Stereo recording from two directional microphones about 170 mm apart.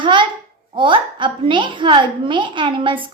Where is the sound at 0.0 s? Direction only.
30° right (ahead or behind).